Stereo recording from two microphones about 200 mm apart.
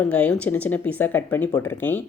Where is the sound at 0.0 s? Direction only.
5° left (ahead or behind).